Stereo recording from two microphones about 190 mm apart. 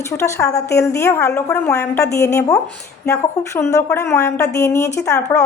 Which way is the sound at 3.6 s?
15° left (ahead or behind).